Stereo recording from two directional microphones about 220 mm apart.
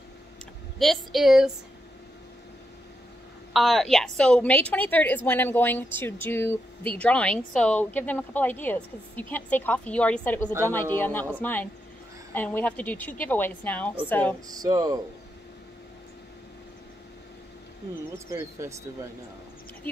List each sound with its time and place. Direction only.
0.7 s a woman's voice: centre (ahead or behind)
3.5 s speech: centre (ahead or behind)
14.5 s speech: 15° right (ahead or behind)
18.3 s speech: 15° right (ahead or behind)